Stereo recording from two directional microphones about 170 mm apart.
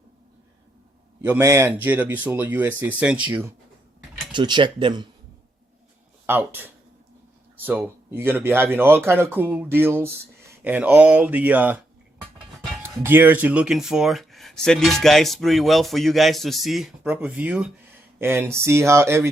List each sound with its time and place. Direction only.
1.2 s speech: 15° right (ahead or behind)
4.3 s speech: 25° right (ahead or behind)
6.2 s speech: 10° right (ahead or behind)
12.8 s speech: 15° right (ahead or behind)